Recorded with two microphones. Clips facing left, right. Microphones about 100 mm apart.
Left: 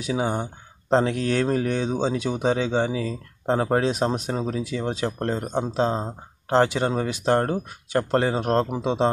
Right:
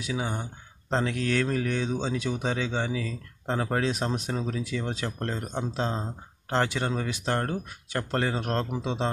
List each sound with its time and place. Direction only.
0.0 s speech: 30° left (ahead or behind)